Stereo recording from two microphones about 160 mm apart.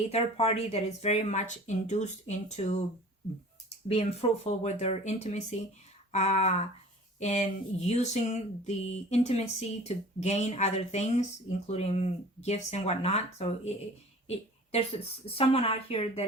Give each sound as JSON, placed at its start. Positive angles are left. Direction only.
{"t": 0.1, "sound": "speech", "side_deg": 40}
{"t": 3.8, "sound": "speech", "side_deg": 40}